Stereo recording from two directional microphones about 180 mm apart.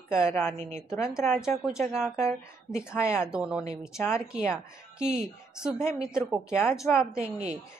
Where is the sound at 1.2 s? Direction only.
10° left (ahead or behind).